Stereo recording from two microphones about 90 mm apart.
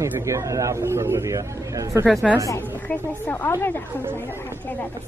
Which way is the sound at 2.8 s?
20° left (ahead or behind).